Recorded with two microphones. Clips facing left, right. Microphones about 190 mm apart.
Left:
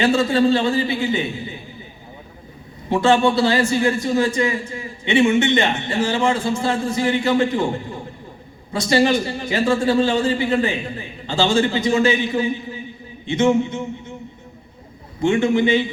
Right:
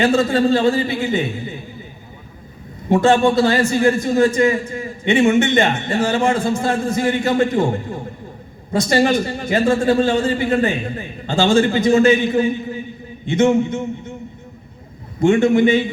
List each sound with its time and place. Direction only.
0.0 s a man's voice: 45° right (ahead or behind)
2.9 s a man's voice: 45° right (ahead or behind)
15.2 s a man's voice: 45° right (ahead or behind)